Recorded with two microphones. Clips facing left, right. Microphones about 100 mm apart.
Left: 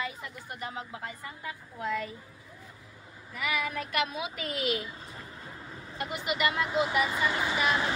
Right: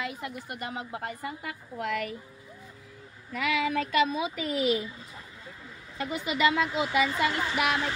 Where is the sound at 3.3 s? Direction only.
90° right.